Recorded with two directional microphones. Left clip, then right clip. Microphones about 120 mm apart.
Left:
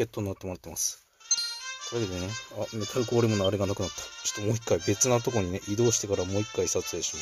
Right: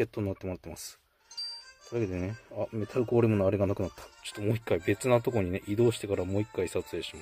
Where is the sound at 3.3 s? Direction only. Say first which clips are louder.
Even; 15° right (ahead or behind).